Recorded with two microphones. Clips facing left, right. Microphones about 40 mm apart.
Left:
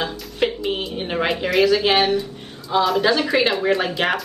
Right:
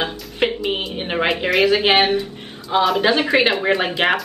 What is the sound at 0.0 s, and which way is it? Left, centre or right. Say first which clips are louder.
Speech: right 1 dB; right.